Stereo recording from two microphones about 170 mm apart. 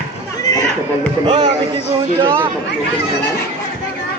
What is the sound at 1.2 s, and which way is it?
Speech, 25° right (ahead or behind).